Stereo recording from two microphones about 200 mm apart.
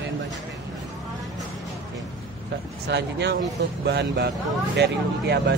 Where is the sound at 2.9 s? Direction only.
60° right (ahead or behind).